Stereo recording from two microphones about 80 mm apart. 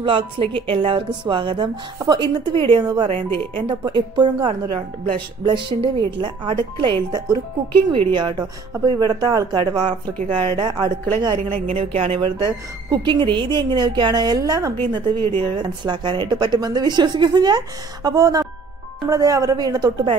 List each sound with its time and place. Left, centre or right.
0.0 s a woman's voice: right
2.0 s a woman's voice: right
8.0 s speech: right
8.9 s a woman's voice: right
12.9 s a woman's voice: right